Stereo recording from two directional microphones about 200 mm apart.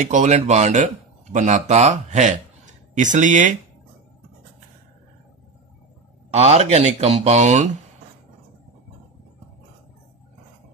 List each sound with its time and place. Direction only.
0.0 s speech: 40° right (ahead or behind)
6.3 s speech: 30° right (ahead or behind)